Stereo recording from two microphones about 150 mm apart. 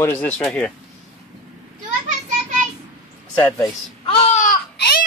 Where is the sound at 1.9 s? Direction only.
55° right (ahead or behind).